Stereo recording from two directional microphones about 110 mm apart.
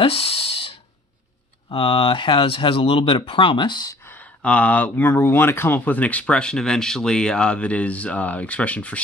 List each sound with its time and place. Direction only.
0.0 s a sound: 60° left (ahead or behind)
1.7 s speech: 55° left (ahead or behind)
4.1 s speech: 15° left (ahead or behind)